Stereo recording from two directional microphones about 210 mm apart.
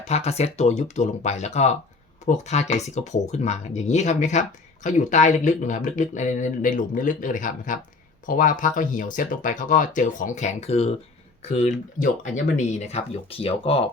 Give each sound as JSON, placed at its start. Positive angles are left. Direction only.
{"t": 0.0, "sound": "speech", "side_deg": 30}